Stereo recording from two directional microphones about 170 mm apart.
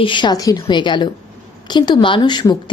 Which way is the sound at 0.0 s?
30° left (ahead or behind).